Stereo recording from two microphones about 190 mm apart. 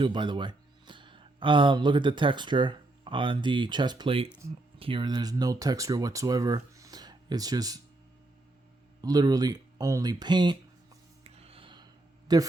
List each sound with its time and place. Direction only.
0.0 s speech: 25° right (ahead or behind)
4.3 s speech: 15° right (ahead or behind)
4.8 s speech: 25° right (ahead or behind)
9.0 s speech: 20° right (ahead or behind)
11.2 s a sound: 30° right (ahead or behind)
12.3 s speech: 20° right (ahead or behind)